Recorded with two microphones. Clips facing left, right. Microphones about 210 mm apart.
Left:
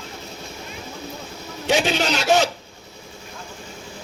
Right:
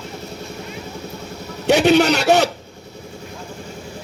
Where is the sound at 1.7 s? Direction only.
65° right (ahead or behind).